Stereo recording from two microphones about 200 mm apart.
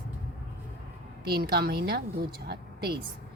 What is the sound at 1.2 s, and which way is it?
A woman's voice, 50° right (ahead or behind).